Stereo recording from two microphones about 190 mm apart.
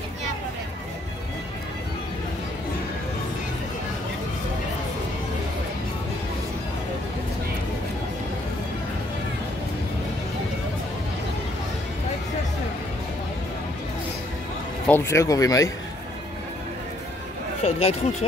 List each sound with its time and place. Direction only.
14.9 s speech: 10° left (ahead or behind)
17.6 s speech: 30° left (ahead or behind)